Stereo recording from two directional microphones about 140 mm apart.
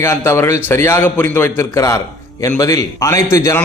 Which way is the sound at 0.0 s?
15° left (ahead or behind).